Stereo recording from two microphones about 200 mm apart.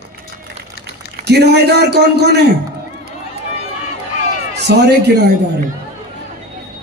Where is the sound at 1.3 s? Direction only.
55° right (ahead or behind).